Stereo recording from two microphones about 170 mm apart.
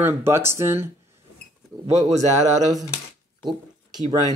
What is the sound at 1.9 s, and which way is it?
Speech, 20° right (ahead or behind).